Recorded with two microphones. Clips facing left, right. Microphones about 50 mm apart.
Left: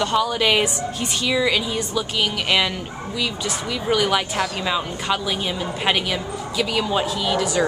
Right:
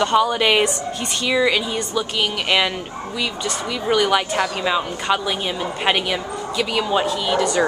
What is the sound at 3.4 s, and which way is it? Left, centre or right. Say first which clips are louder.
A woman's voice: right 1 dB; centre.